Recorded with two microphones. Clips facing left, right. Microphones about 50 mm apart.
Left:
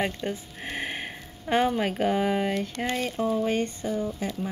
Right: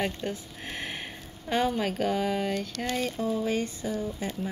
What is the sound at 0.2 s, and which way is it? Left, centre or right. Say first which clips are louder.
Speech: left 2 dB; left.